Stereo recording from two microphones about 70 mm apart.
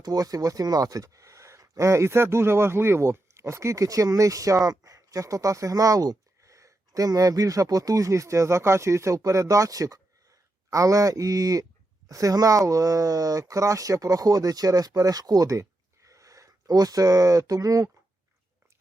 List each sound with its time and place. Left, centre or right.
0.0 s speech: right